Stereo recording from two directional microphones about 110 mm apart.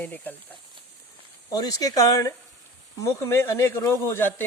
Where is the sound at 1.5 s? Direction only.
35° left (ahead or behind).